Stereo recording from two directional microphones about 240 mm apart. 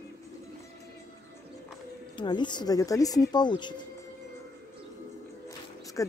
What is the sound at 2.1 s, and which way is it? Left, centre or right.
Speech, centre.